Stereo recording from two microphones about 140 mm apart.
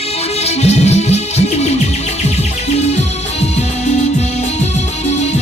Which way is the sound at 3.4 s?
50° left (ahead or behind).